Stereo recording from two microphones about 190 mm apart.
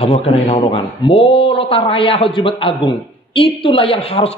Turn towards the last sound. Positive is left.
turn(degrees=30)  # may be behind; listen again after turning